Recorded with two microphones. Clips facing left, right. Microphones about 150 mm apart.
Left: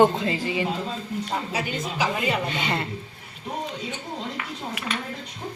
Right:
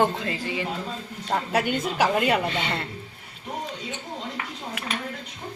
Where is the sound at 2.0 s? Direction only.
60° right (ahead or behind).